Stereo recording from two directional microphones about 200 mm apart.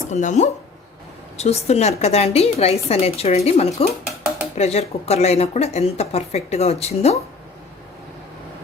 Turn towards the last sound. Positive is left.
turn(degrees=30)  # may be behind; listen again after turning